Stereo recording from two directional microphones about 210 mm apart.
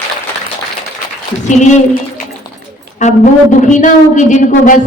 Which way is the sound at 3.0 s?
35° left (ahead or behind).